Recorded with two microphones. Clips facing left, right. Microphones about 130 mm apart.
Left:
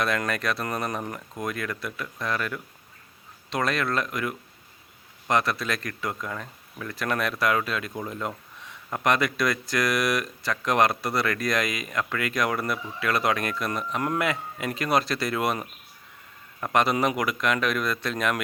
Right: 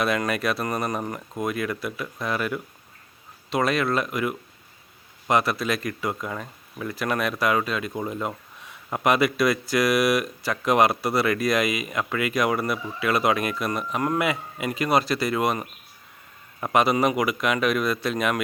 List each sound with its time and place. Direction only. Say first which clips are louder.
0.0 s speech: right 3 dB; 5° right (ahead or behind)